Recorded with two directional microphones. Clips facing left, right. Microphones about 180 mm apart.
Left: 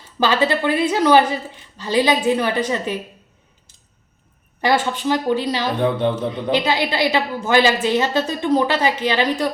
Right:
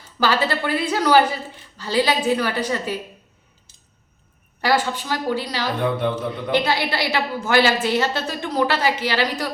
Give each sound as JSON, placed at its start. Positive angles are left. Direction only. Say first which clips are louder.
{"t": 0.2, "sound": "a woman's voice", "louder": "left 3 dB", "side_deg": 20}
{"t": 4.6, "sound": "a woman's voice", "louder": "left 2 dB", "side_deg": 20}